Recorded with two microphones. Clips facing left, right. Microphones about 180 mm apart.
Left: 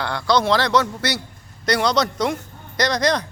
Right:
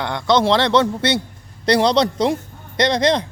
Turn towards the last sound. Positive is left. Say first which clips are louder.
# right 3 dB
turn(degrees=-25)  # may be behind; listen again after turning